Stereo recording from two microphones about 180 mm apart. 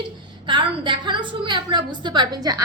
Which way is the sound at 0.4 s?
25° right (ahead or behind).